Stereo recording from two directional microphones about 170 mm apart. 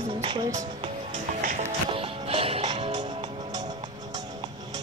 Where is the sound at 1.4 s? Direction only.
50° right (ahead or behind).